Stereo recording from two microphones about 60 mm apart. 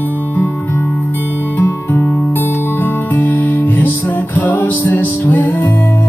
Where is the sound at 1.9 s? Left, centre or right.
Left.